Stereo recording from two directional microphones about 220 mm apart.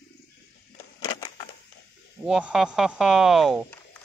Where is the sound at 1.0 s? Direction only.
20° left (ahead or behind).